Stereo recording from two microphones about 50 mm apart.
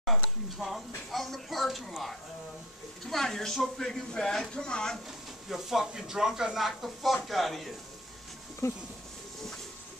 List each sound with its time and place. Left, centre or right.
0.0 s speech: centre
3.1 s speech: centre
5.5 s speech: centre
8.6 s speech: left